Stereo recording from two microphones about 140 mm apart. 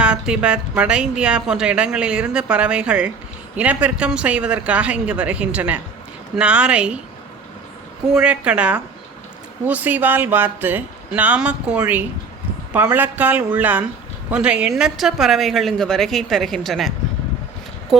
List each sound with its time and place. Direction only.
0.0 s a woman's voice: 5° right (ahead or behind)
8.1 s a woman's voice: 5° right (ahead or behind)